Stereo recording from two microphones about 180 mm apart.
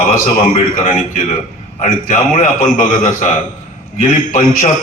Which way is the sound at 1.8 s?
50° left (ahead or behind).